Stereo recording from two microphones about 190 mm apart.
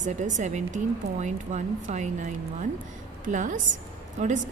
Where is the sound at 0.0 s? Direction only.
40° right (ahead or behind).